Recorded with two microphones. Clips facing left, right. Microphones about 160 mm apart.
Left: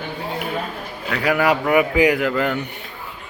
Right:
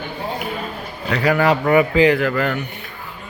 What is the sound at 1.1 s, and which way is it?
Speech, 5° left (ahead or behind).